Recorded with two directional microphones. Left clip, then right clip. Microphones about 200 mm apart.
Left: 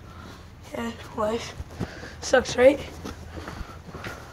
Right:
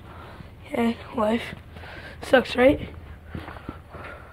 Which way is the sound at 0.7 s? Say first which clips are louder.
Right 5 dB; 50° right (ahead or behind).